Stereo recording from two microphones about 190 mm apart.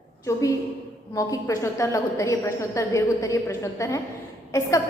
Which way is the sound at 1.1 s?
15° left (ahead or behind).